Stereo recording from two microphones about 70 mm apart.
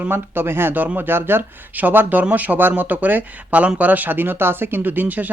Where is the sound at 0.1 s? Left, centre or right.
Right.